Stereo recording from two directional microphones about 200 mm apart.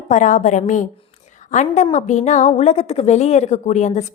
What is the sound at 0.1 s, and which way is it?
A woman's voice, 40° left (ahead or behind).